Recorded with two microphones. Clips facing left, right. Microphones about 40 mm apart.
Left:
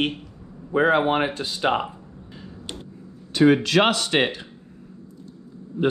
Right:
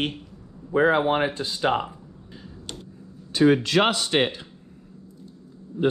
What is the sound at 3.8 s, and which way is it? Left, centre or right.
Speech, left.